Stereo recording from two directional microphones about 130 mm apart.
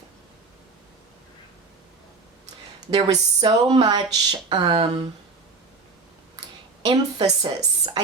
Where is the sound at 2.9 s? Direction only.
35° right (ahead or behind).